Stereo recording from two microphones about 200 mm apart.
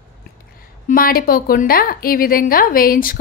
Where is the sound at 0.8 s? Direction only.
45° left (ahead or behind).